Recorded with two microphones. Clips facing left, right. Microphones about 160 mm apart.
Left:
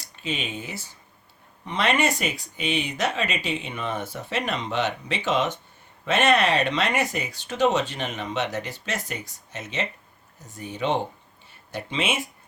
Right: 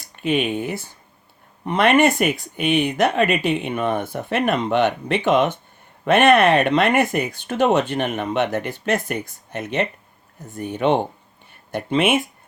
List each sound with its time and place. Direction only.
0.0 s speech: 60° right (ahead or behind)